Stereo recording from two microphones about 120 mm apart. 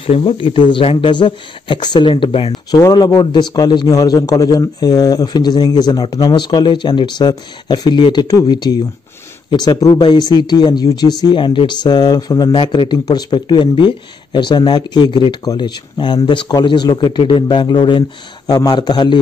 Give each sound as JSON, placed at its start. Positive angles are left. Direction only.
{"t": 0.0, "sound": "speech", "side_deg": 50}
{"t": 2.7, "sound": "speech", "side_deg": 35}